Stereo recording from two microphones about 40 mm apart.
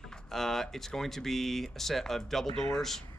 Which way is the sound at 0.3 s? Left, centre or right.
Centre.